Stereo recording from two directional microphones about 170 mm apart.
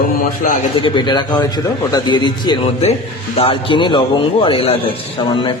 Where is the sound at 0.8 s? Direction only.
30° left (ahead or behind).